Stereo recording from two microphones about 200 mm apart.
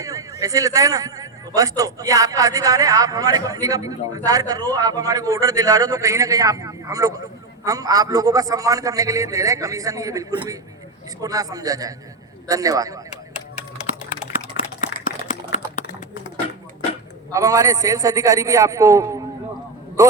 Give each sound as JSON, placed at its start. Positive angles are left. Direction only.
{"t": 0.0, "sound": "a man's voice", "side_deg": -15}
{"t": 14.5, "sound": "a sound", "side_deg": 55}
{"t": 17.3, "sound": "a man's voice", "side_deg": -15}